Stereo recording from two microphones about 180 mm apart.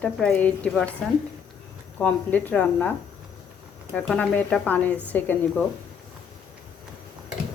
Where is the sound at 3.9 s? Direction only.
5° left (ahead or behind).